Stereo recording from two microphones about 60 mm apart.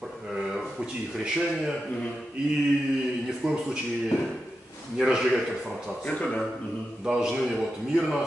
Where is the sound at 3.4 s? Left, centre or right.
Centre.